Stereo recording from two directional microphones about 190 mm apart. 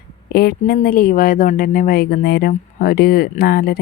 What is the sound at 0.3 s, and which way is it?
Speech, 55° left (ahead or behind).